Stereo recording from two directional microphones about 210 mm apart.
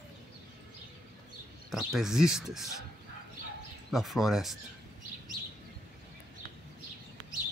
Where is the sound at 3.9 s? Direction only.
Centre (ahead or behind).